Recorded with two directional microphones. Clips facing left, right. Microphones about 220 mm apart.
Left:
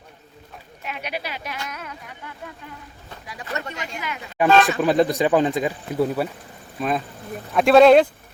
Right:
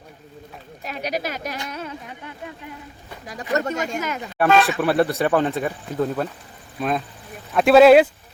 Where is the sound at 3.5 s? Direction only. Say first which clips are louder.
Right 8 dB; 45° right (ahead or behind).